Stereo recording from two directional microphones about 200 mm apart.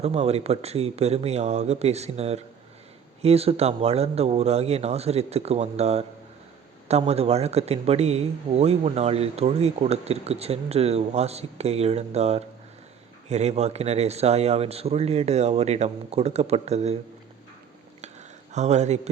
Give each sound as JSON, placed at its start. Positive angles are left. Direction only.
{"t": 0.0, "sound": "a man's voice", "side_deg": -30}
{"t": 18.5, "sound": "a man's voice", "side_deg": -35}